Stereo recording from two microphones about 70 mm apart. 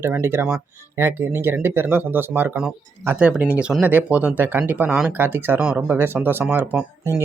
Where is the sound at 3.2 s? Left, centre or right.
Centre.